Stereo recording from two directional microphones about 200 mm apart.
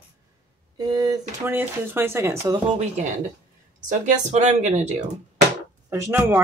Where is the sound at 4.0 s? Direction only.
35° right (ahead or behind).